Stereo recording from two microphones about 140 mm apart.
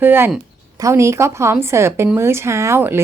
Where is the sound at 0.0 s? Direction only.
15° right (ahead or behind).